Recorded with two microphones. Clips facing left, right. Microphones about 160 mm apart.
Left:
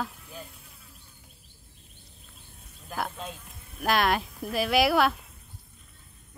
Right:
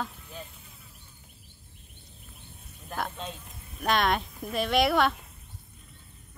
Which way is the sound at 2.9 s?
5° left (ahead or behind).